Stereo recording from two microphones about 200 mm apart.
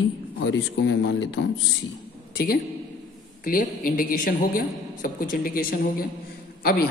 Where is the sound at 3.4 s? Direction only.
45° left (ahead or behind).